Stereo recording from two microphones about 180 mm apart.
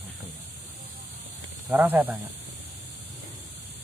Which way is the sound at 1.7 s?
10° right (ahead or behind).